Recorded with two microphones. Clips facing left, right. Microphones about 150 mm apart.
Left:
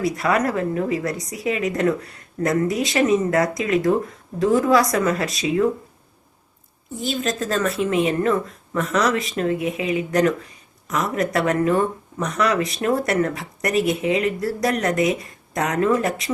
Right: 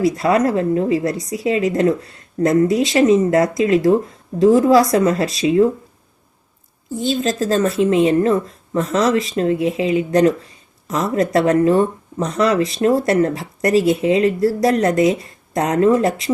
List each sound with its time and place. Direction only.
0.0 s speech: 25° right (ahead or behind)
7.0 s speech: 30° right (ahead or behind)